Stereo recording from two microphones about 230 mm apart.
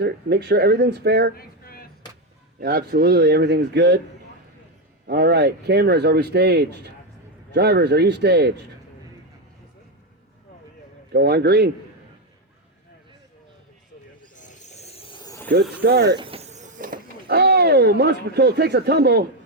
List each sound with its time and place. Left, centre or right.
0.0 s speech: right
1.4 s a sound: left
2.6 s speech: right
5.0 s speech: right
11.1 s speech: right
14.3 s snake: left; by 15.5 s centre
15.8 s speech: right
16.1 s a sound: right